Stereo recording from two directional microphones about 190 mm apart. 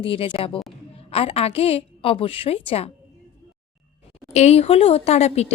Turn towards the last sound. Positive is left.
turn(degrees=35)  # may be behind; listen again after turning